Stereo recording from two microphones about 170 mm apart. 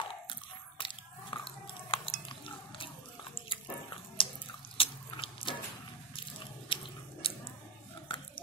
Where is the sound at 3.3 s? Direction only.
30° left (ahead or behind).